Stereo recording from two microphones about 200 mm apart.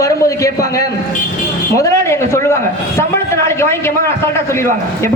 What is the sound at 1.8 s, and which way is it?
Speech, 15° left (ahead or behind).